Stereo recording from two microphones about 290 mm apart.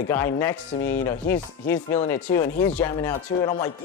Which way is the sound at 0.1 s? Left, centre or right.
Centre.